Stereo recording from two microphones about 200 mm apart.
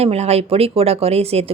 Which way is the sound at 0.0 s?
30° right (ahead or behind).